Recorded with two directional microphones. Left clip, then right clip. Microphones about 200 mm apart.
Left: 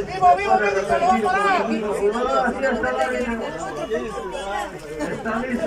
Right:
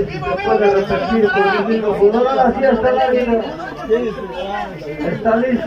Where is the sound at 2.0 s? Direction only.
30° right (ahead or behind).